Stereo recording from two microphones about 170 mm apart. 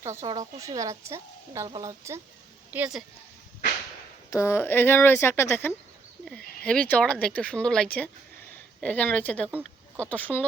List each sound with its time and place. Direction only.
0.0 s a woman's voice: 15° right (ahead or behind)
4.3 s speech: 15° left (ahead or behind)
9.5 s a sound: 10° right (ahead or behind)
10.1 s speech: 10° left (ahead or behind)